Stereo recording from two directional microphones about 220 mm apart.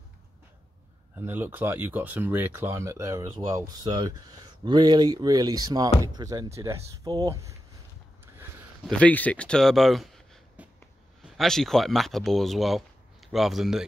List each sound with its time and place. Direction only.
1.1 s speech: 10° right (ahead or behind)
9.0 s speech: 5° left (ahead or behind)